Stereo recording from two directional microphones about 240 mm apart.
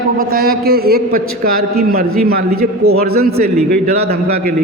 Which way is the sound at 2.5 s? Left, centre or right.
Right.